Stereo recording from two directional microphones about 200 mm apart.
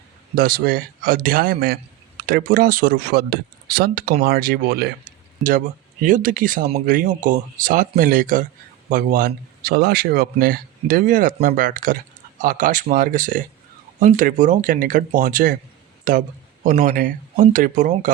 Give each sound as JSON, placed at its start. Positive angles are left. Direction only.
{"t": 0.3, "sound": "speech", "side_deg": -50}